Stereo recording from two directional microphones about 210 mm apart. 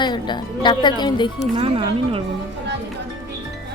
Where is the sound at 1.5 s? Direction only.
25° right (ahead or behind).